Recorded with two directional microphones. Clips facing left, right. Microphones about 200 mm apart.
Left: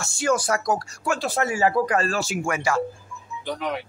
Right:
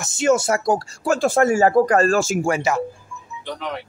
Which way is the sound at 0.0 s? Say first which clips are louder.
Right 5 dB; 20° right (ahead or behind).